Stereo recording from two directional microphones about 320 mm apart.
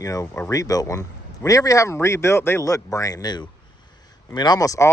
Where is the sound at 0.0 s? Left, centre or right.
Centre.